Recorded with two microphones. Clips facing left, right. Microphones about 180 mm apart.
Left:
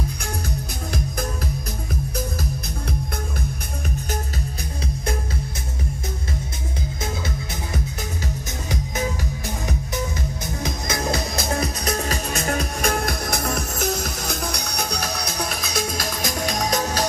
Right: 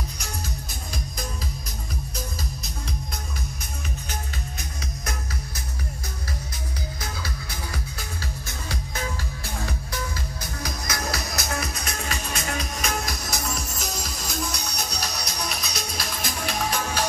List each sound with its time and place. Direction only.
7.0 s music: 25° left (ahead or behind); by 17.0 s 40° left (ahead or behind)